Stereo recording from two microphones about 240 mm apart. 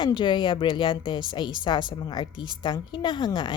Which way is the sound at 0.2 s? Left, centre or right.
Centre.